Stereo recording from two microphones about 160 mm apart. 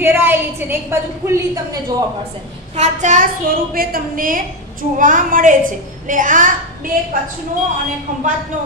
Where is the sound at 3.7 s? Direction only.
65° right (ahead or behind).